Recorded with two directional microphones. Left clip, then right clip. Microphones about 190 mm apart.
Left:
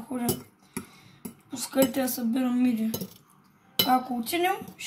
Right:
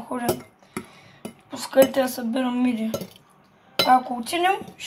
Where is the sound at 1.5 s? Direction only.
20° left (ahead or behind).